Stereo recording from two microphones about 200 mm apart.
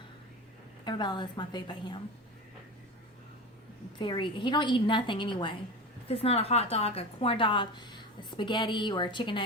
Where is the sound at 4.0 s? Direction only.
25° left (ahead or behind).